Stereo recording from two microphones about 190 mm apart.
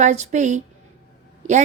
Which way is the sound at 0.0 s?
40° right (ahead or behind).